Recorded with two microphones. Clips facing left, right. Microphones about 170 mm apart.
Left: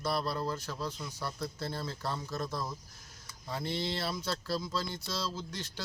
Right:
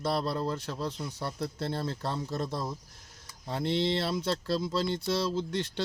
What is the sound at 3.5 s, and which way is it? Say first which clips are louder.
Speech: right 7 dB; 65° right (ahead or behind).